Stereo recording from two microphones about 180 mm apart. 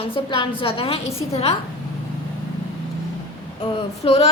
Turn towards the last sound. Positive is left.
turn(degrees=35)  # may be behind; listen again after turning